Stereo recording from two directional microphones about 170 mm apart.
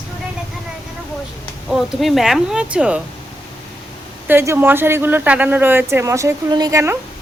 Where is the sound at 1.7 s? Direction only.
Centre (ahead or behind).